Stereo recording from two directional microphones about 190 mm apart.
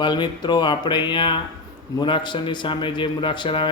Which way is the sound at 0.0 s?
25° left (ahead or behind).